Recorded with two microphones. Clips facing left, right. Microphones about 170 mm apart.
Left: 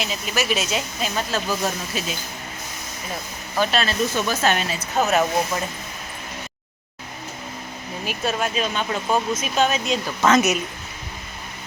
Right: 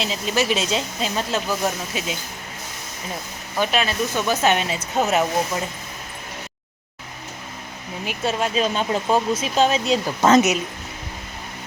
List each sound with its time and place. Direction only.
0.0 s speech: 30° right (ahead or behind)
3.6 s speech: 15° right (ahead or behind)
8.0 s speech: 25° right (ahead or behind)